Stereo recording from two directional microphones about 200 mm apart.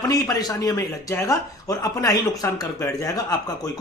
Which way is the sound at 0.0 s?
20° left (ahead or behind).